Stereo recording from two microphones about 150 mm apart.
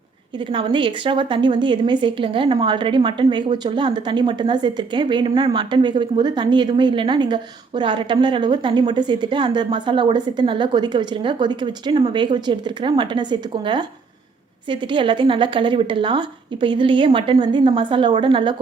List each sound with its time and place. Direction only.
0.3 s a woman's voice: 35° right (ahead or behind)